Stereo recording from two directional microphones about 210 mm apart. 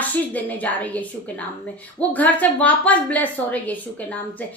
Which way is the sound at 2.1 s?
5° left (ahead or behind).